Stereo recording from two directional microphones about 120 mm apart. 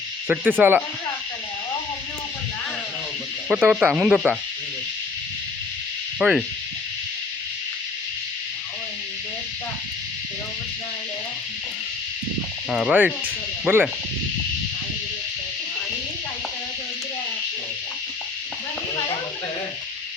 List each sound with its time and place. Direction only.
0.3 s speech: 15° right (ahead or behind)
3.5 s speech: 5° right (ahead or behind)
6.1 s speech: 5° right (ahead or behind)
12.7 s speech: 10° right (ahead or behind)
13.2 s music: 20° right (ahead or behind)